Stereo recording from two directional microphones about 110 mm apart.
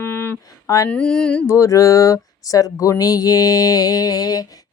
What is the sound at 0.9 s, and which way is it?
Mantra, 5° left (ahead or behind).